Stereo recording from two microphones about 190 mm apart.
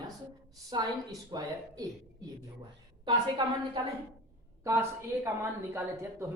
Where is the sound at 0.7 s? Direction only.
20° right (ahead or behind).